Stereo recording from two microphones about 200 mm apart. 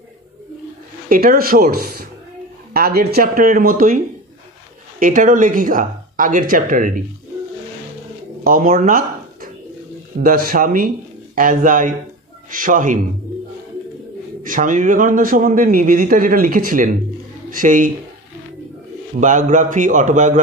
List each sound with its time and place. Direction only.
1.0 s a man's voice: 45° right (ahead or behind)
8.5 s a man's voice: 45° right (ahead or behind)
14.4 s a man's voice: 40° right (ahead or behind)
19.1 s speech: 40° right (ahead or behind)